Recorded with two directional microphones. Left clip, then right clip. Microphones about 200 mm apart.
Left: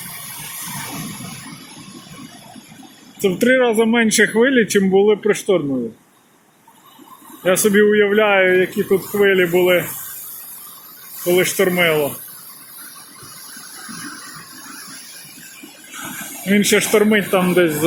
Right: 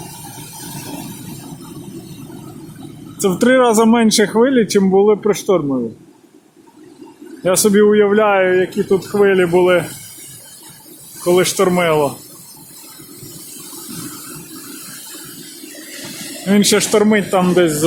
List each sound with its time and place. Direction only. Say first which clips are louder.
3.2 s speech: right 2 dB; 15° right (ahead or behind)
7.4 s speech: right 2 dB; 5° right (ahead or behind)
11.3 s speech: right 2 dB; 15° right (ahead or behind)
16.5 s speech: right 2 dB; 15° right (ahead or behind)
16.9 s speech: right 1 dB; centre (ahead or behind)